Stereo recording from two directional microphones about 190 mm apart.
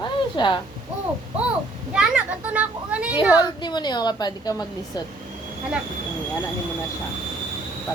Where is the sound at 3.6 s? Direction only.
20° left (ahead or behind).